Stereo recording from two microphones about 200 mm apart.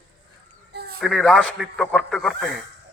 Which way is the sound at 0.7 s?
50° right (ahead or behind).